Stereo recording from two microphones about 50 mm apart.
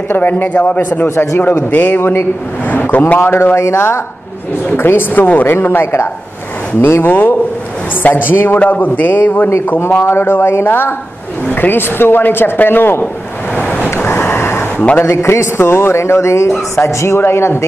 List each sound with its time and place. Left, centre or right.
0.1 s speech: left
0.5 s speech: left
3.3 s speech: left
4.7 s speech: left
10.0 s speech: left
13.6 s waves: left
13.9 s vehicle: left
15.0 s a man's voice: left
17.2 s speech: left